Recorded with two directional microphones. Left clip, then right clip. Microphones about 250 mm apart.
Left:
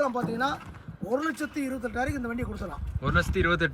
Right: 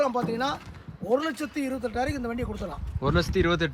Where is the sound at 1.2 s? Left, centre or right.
Right.